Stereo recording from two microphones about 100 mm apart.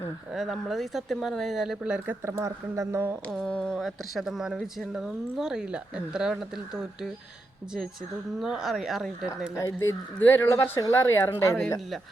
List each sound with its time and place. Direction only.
0.3 s speech: centre (ahead or behind)
2.2 s speech: 30° right (ahead or behind)
3.5 s speech: 5° left (ahead or behind)
8.4 s speech: 5° right (ahead or behind)
9.6 s speech: 30° left (ahead or behind)
11.0 s speech: 25° left (ahead or behind)